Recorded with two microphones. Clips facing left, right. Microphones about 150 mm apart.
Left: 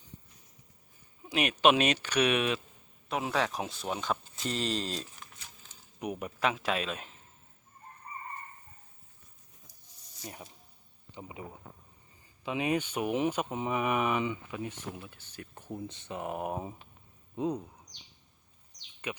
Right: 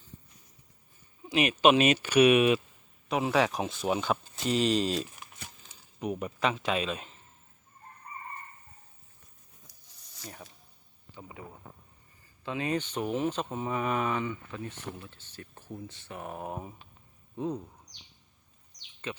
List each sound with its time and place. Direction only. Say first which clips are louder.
1.3 s speech: right 2 dB; centre (ahead or behind)
6.0 s speech: right 2 dB; 10° left (ahead or behind)
10.2 s speech: left 1 dB; 15° left (ahead or behind)
12.5 s speech: left 1 dB; 15° left (ahead or behind)
19.0 s speech: even; 15° left (ahead or behind)